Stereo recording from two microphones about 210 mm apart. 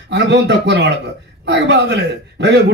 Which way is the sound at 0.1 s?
55° right (ahead or behind).